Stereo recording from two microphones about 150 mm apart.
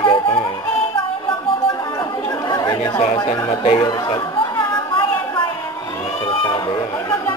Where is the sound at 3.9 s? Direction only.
30° left (ahead or behind).